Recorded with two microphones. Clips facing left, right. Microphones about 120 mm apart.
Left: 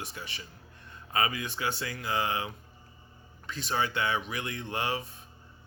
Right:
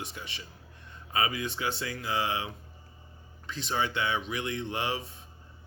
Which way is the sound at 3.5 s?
25° right (ahead or behind).